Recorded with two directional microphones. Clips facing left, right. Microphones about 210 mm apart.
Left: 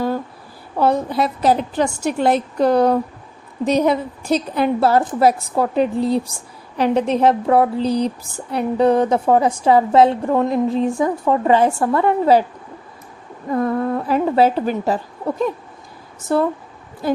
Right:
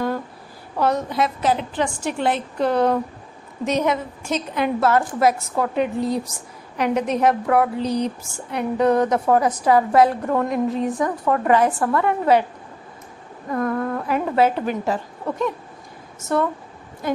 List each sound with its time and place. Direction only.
0.8 s a woman's voice: 30° left (ahead or behind)
13.5 s a woman's voice: 25° left (ahead or behind)
16.3 s a woman's voice: 30° left (ahead or behind)